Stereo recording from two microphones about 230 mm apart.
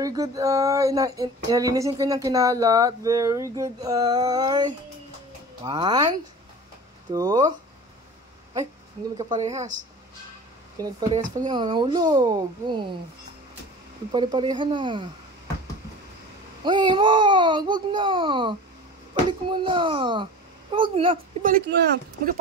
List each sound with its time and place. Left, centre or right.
0.0 s a sound: centre
5.6 s speech: centre
7.1 s a sound: centre
9.2 s speech: right
10.8 s a sound: centre
11.4 s speech: centre
14.1 s speech: centre
16.6 s speech: centre
21.4 s speech: right